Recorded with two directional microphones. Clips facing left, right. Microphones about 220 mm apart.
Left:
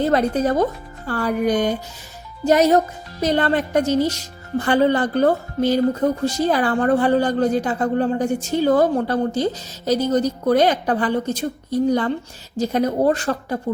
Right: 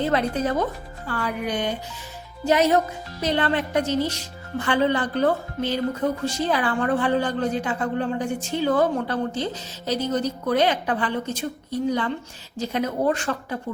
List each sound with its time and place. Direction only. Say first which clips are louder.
0.0 s speech: left 5 dB; 45° left (ahead or behind)